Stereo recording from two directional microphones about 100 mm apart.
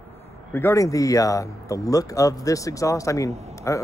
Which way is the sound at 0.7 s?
35° left (ahead or behind).